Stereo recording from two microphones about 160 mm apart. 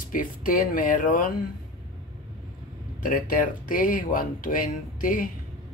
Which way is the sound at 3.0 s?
60° left (ahead or behind).